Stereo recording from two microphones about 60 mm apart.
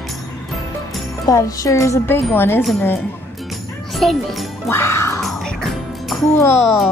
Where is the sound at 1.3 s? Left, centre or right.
Left.